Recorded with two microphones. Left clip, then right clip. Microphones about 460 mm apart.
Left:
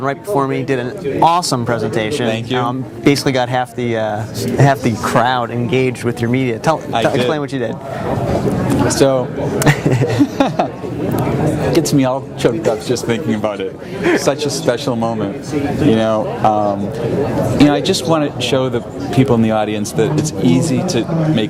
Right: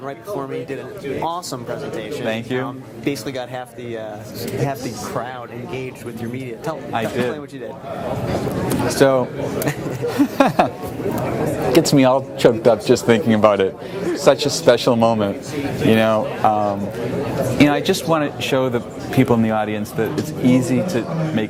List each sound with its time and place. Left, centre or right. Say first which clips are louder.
0.0 s speech: left 10 dB; left
2.3 s speech: left 5 dB; centre
2.6 s speech: left 10 dB; left
9.0 s speech: even; right
9.7 s chuckle: left 9 dB; left
10.2 s a sound: right 4 dB; right
11.7 s speech: right 3 dB; right